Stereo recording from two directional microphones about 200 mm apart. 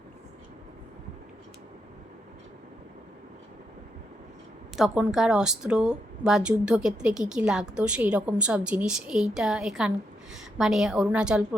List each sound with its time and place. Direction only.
4.8 s a woman's voice: centre (ahead or behind)